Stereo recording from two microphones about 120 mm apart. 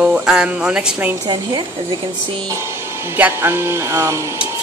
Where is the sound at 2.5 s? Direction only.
25° right (ahead or behind).